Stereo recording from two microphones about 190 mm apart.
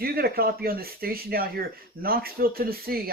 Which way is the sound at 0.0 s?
55° right (ahead or behind).